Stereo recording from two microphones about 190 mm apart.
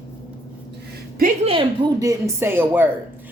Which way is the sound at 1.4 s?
30° right (ahead or behind).